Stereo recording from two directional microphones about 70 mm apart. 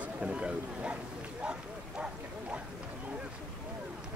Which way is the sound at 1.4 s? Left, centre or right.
Centre.